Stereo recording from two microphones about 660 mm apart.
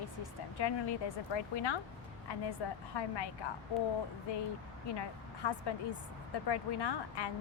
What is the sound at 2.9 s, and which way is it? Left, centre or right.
Speech, left.